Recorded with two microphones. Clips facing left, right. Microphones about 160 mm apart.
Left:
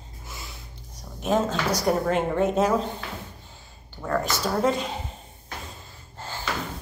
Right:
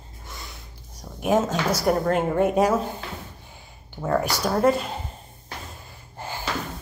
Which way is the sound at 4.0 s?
15° right (ahead or behind).